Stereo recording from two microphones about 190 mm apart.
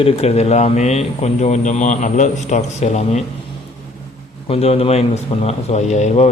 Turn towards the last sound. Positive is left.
turn(degrees=35)  # may be behind; listen again after turning